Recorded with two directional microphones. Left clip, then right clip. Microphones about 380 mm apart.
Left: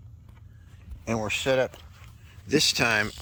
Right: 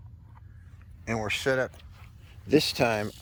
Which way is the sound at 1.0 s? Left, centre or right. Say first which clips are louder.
Left 1 dB; centre.